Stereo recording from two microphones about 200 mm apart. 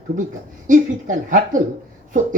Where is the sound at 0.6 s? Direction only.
40° right (ahead or behind).